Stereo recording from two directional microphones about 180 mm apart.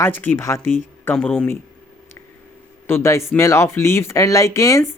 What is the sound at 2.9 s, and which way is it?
Speech, 15° left (ahead or behind).